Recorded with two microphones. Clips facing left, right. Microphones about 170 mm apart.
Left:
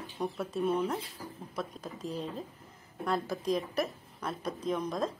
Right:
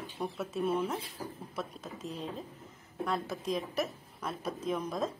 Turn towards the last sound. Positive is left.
turn(degrees=-5)  # may be behind; listen again after turning